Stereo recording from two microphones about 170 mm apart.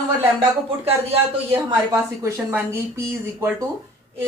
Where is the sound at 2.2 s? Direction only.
15° right (ahead or behind).